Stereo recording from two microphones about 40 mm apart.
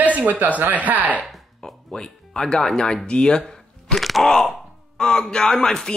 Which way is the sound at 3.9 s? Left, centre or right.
Centre.